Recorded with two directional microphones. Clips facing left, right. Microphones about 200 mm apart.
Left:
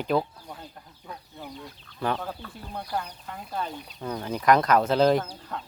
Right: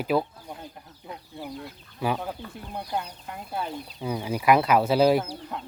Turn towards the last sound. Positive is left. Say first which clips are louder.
# right 1 dB
turn(degrees=-5)  # may be behind; listen again after turning